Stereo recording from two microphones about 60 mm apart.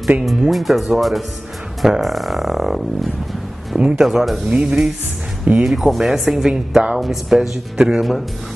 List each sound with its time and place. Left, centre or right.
0.2 s speech: centre
5.7 s speech: centre
7.0 s speech: centre